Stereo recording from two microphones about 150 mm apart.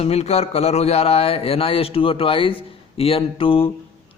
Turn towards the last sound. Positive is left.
turn(degrees=40)  # may be behind; listen again after turning